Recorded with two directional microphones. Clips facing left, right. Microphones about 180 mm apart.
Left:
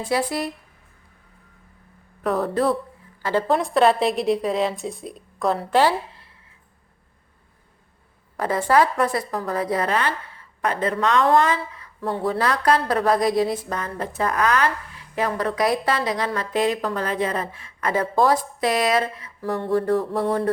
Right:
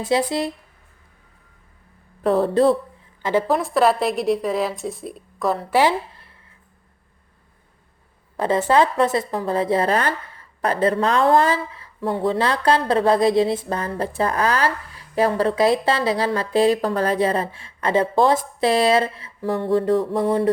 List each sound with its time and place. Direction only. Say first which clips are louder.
0.1 s speech: right 3 dB; 25° right (ahead or behind)
2.2 s speech: right 5 dB; 30° right (ahead or behind)
3.4 s a woman's voice: left 2 dB; centre (ahead or behind)
8.4 s speech: right 2 dB; 25° right (ahead or behind)